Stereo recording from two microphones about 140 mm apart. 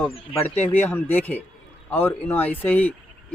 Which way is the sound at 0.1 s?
45° left (ahead or behind).